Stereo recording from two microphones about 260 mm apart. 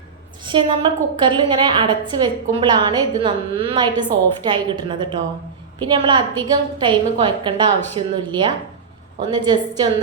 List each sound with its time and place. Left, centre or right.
0.4 s a woman's voice: centre